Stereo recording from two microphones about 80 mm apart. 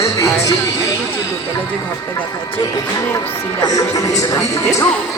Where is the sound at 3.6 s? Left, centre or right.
Left.